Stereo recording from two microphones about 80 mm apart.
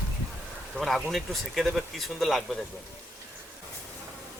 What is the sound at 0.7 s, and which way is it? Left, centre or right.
Speech, centre.